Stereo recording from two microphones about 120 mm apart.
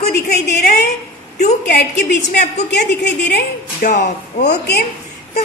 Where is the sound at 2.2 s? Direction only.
80° left.